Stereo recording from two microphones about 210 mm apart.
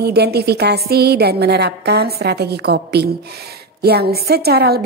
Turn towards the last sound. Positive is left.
turn(degrees=-50)  # may be behind; listen again after turning